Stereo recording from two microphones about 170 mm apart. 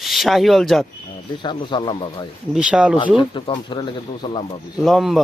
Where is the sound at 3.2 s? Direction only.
30° left (ahead or behind).